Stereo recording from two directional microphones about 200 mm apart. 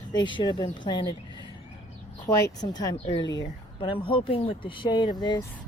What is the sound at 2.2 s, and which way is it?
Speech, 15° left (ahead or behind).